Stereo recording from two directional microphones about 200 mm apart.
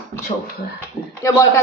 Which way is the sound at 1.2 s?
15° left (ahead or behind).